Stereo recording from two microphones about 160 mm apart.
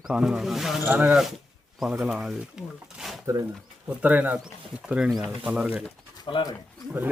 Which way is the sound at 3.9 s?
10° right (ahead or behind).